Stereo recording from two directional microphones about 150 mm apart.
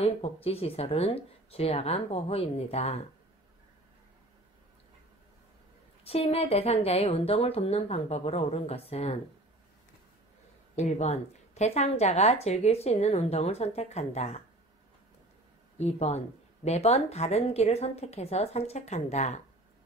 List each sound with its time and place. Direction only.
0.0 s speech: 40° left (ahead or behind)
6.0 s a woman's voice: 40° left (ahead or behind)
10.8 s a woman's voice: 50° left (ahead or behind)
15.8 s a woman's voice: 45° left (ahead or behind)